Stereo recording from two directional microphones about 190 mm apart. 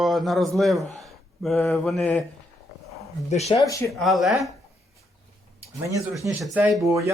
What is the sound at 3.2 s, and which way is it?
Speech, 35° left (ahead or behind).